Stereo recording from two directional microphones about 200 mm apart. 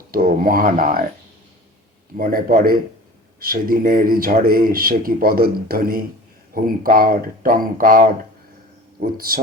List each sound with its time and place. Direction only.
0.1 s speech: 45° right (ahead or behind)
2.1 s speech: 45° right (ahead or behind)